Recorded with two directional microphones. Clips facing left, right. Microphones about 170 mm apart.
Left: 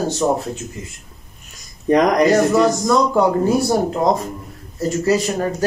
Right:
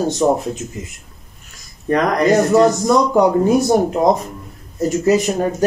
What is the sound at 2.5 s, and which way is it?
Speech, 15° right (ahead or behind).